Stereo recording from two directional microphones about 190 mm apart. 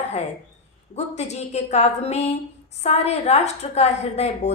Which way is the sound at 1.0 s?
35° left (ahead or behind).